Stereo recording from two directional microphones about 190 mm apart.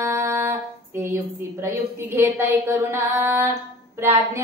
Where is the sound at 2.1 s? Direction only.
15° right (ahead or behind).